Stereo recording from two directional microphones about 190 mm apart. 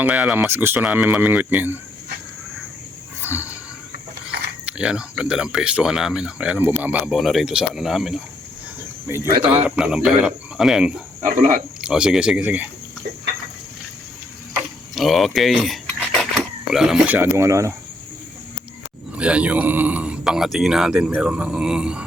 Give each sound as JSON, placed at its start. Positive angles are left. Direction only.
{"t": 0.0, "sound": "speech", "side_deg": -5}
{"t": 3.2, "sound": "wild animals", "side_deg": -10}
{"t": 4.6, "sound": "speech", "side_deg": -5}
{"t": 9.0, "sound": "speech", "side_deg": -10}
{"t": 11.2, "sound": "speech", "side_deg": -40}
{"t": 11.8, "sound": "speech", "side_deg": -5}
{"t": 14.9, "sound": "speech", "side_deg": 0}
{"t": 19.1, "sound": "speech", "side_deg": -5}